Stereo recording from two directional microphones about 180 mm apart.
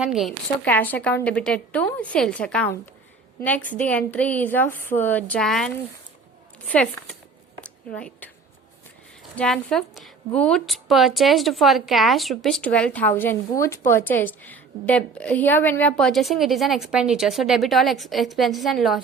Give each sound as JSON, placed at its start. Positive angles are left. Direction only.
{"t": 0.0, "sound": "a woman's voice", "side_deg": 0}
{"t": 7.6, "sound": "a sound", "side_deg": 5}
{"t": 9.3, "sound": "a woman's voice", "side_deg": 5}